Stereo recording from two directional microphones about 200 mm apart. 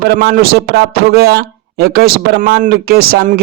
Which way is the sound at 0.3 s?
50° right (ahead or behind).